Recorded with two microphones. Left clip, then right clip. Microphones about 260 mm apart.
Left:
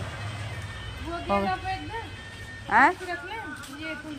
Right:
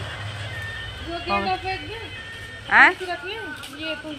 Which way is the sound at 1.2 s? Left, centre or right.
Centre.